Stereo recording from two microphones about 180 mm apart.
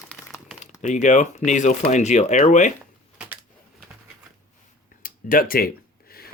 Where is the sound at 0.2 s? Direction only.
10° right (ahead or behind).